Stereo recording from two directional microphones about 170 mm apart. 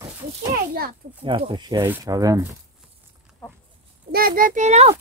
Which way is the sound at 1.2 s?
30° right (ahead or behind).